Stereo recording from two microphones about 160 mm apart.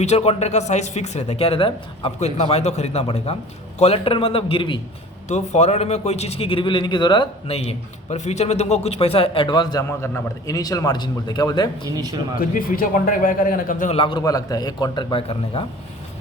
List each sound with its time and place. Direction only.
0.0 s speech: 40° left (ahead or behind)
2.1 s a man's voice: 45° left (ahead or behind)
5.3 s a man's voice: 45° left (ahead or behind); by 11.9 s 25° left (ahead or behind)
11.9 s speech: 20° right (ahead or behind)
12.4 s a man's voice: 60° left (ahead or behind)
13.9 s speech: 30° left (ahead or behind)